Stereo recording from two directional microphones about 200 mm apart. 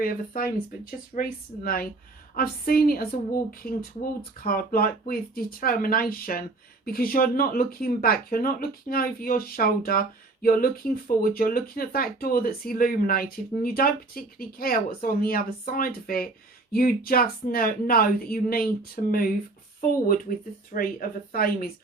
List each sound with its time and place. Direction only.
0.0 s speech: 45° left (ahead or behind)
20.7 s speech: 45° left (ahead or behind)